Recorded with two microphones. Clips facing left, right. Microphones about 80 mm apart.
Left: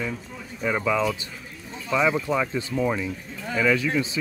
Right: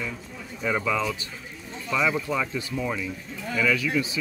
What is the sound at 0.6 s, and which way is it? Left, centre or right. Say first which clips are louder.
Speech: left 2 dB; centre.